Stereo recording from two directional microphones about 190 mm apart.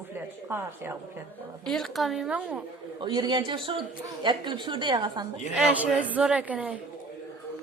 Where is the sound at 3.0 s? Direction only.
25° right (ahead or behind).